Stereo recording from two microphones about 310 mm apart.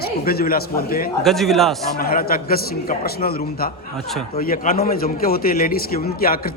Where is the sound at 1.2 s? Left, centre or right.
Centre.